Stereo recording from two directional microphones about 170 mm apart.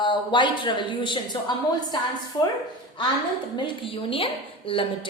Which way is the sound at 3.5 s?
30° left (ahead or behind).